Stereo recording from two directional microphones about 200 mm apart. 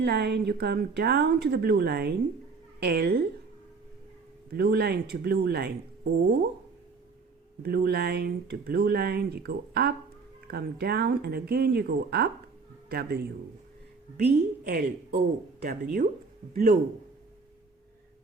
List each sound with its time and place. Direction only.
0.0 s a woman's voice: 55° right (ahead or behind)
4.5 s speech: 55° right (ahead or behind)
7.6 s speech: 50° right (ahead or behind)